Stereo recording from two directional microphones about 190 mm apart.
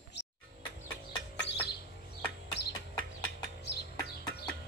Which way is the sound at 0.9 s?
65° left (ahead or behind).